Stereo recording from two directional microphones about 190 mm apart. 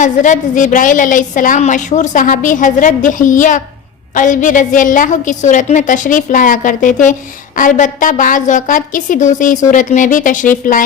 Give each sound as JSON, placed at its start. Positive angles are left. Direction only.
{"t": 0.0, "sound": "a woman's voice", "side_deg": 40}